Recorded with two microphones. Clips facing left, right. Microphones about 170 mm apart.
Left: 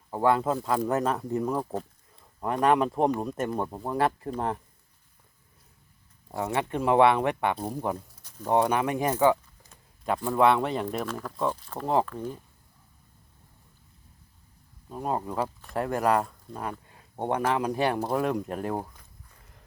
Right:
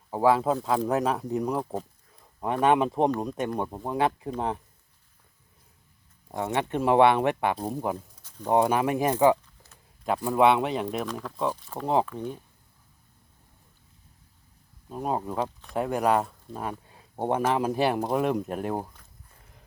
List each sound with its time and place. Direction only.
0.1 s speech: 5° right (ahead or behind)
1.4 s speech: 10° right (ahead or behind)
6.3 s speech: centre (ahead or behind); by 10.6 s 15° right (ahead or behind)
10.6 s speech: 5° right (ahead or behind)
10.8 s speech: 15° right (ahead or behind)
11.1 s speech: centre (ahead or behind)
14.8 s speech: 15° right (ahead or behind)
17.2 s speech: 5° right (ahead or behind)